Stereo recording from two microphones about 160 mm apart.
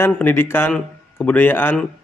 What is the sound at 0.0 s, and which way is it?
A man's voice, 15° left (ahead or behind).